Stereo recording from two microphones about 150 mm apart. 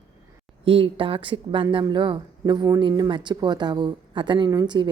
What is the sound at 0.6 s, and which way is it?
A woman's voice, 35° right (ahead or behind).